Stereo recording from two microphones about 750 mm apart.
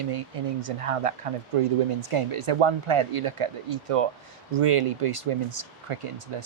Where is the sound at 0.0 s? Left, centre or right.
Right.